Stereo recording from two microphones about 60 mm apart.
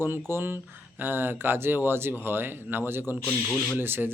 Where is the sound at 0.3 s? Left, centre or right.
Right.